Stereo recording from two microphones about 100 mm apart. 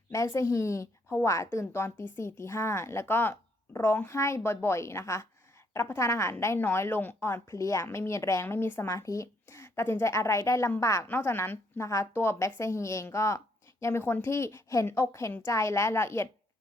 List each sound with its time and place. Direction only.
0.3 s a woman's voice: 30° left (ahead or behind)